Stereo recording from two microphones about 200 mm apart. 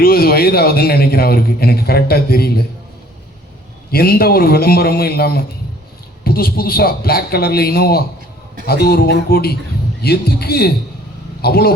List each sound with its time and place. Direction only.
0.0 s a man's voice: 50° left (ahead or behind)
3.9 s a man's voice: 50° left (ahead or behind)